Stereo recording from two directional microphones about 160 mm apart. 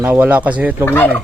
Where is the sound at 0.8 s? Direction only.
10° left (ahead or behind).